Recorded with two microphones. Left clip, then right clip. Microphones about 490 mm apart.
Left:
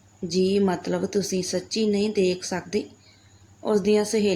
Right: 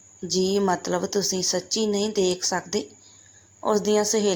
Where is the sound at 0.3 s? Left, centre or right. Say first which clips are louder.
Even; centre.